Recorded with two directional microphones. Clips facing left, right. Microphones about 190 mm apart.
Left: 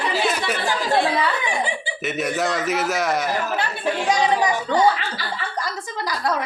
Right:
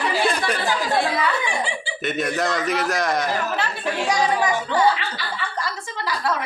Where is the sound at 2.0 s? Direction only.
5° left (ahead or behind).